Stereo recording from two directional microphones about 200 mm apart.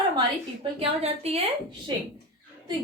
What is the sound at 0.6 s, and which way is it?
Speech, 30° right (ahead or behind).